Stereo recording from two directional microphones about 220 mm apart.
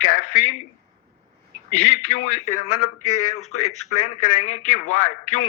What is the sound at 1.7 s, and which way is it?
Speech, 35° left (ahead or behind).